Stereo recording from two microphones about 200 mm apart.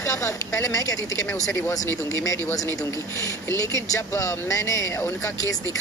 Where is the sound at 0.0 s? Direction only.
15° left (ahead or behind).